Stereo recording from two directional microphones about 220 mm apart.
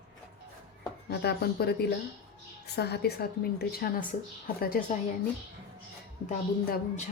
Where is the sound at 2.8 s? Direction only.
45° left (ahead or behind).